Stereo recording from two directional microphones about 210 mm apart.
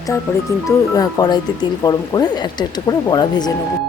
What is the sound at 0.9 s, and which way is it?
Speech, 20° left (ahead or behind).